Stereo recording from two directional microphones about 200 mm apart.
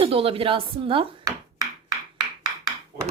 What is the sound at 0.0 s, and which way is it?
A woman's voice, 30° right (ahead or behind).